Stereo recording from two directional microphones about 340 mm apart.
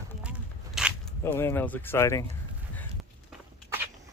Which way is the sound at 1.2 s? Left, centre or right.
Centre.